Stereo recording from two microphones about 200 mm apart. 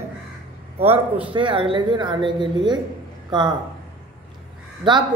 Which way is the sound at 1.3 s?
25° right (ahead or behind).